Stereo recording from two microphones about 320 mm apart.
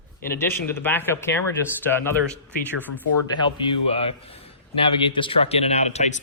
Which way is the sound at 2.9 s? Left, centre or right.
Centre.